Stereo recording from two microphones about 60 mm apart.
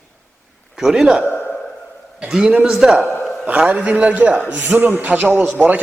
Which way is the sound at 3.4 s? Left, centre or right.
Right.